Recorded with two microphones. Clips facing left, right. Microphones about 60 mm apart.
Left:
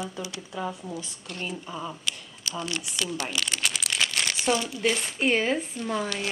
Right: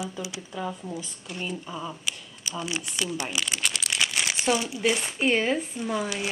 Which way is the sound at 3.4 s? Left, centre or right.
Centre.